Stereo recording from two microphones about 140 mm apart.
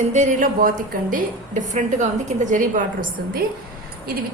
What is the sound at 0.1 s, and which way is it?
A woman's voice, 60° right (ahead or behind).